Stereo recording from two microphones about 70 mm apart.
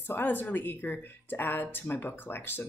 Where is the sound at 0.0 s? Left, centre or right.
Left.